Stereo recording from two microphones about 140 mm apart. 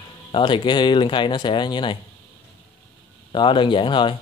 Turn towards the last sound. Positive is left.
turn(degrees=35)  # may be behind; listen again after turning